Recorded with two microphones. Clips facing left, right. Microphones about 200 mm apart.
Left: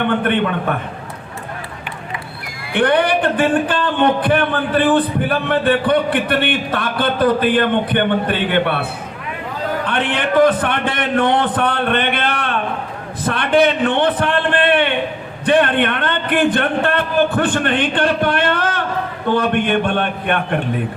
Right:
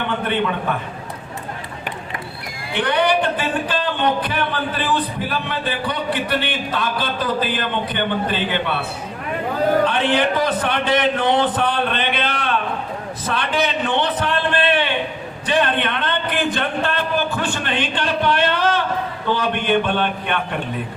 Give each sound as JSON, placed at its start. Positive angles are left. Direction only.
{"t": 0.0, "sound": "speech", "side_deg": 55}
{"t": 2.7, "sound": "speech", "side_deg": 55}
{"t": 9.8, "sound": "a man's voice", "side_deg": 55}
{"t": 13.2, "sound": "a sound", "side_deg": 55}
{"t": 15.4, "sound": "a man's voice", "side_deg": 55}